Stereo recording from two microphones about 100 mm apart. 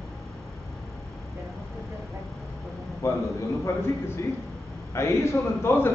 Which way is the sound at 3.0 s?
30° left (ahead or behind).